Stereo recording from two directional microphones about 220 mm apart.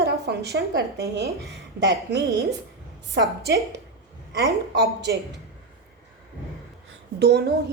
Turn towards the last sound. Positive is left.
turn(degrees=-50)  # may be behind; listen again after turning